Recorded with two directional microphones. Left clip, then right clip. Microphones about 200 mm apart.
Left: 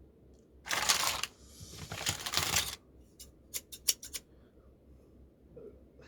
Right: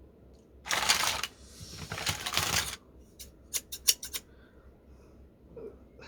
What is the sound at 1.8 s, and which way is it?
Typing, 35° left (ahead or behind).